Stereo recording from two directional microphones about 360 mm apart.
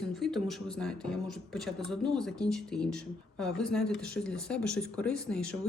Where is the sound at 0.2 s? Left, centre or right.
Centre.